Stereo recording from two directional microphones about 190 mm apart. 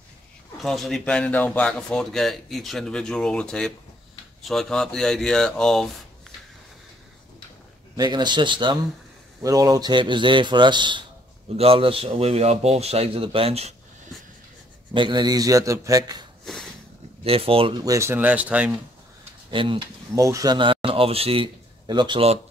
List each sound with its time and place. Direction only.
0.6 s speech: centre (ahead or behind)
7.9 s a man's voice: 20° right (ahead or behind)
15.0 s a man's voice: 25° right (ahead or behind)
17.2 s speech: 30° right (ahead or behind); by 18.7 s 5° right (ahead or behind)
19.5 s speech: 25° right (ahead or behind)